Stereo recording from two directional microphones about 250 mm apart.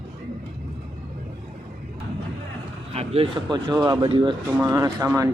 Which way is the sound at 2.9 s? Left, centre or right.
Right.